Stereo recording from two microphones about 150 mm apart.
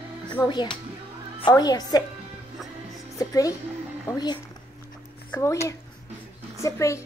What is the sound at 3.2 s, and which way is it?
A child's voice, 20° left (ahead or behind).